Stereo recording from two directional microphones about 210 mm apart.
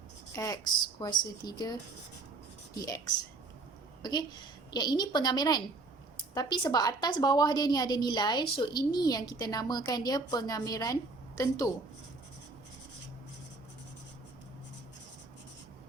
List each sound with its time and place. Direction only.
0.3 s a woman's voice: 15° left (ahead or behind)
4.0 s a woman's voice: 20° left (ahead or behind)